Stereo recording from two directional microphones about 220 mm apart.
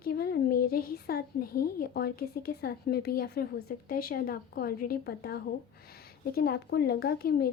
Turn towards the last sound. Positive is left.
turn(degrees=45)  # may be behind; listen again after turning